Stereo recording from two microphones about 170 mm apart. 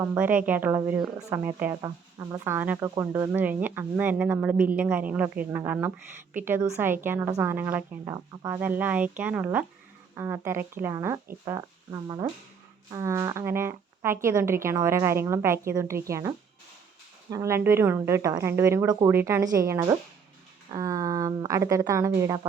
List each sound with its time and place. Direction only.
0.0 s speech: 15° right (ahead or behind)